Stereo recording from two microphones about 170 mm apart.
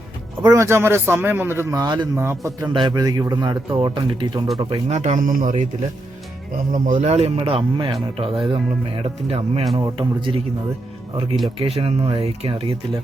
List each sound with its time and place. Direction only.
0.4 s a man's voice: 15° right (ahead or behind)
2.7 s a man's voice: 25° right (ahead or behind)
4.7 s speech: 40° right (ahead or behind)
6.7 s a man's voice: 50° right (ahead or behind); by 10.4 s 30° right (ahead or behind)
11.6 s speech: 35° right (ahead or behind)